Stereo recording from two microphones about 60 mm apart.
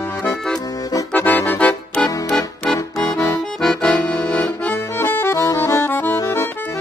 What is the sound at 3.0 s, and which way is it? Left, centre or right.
Accordion, left.